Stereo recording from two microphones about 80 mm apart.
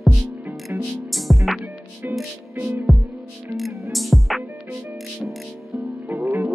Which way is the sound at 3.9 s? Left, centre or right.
Centre.